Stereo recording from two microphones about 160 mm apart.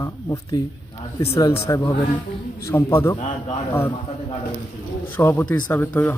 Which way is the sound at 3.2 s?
40° left (ahead or behind).